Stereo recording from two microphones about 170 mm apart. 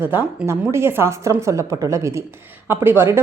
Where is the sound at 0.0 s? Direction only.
10° right (ahead or behind).